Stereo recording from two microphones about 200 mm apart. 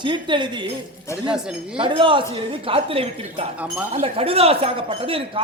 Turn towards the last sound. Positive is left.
turn(degrees=-25)  # may be behind; listen again after turning